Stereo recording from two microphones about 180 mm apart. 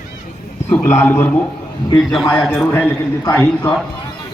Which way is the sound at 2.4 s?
5° right (ahead or behind).